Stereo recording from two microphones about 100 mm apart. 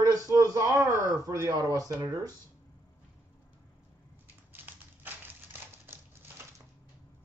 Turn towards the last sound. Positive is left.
turn(degrees=-20)  # may be behind; listen again after turning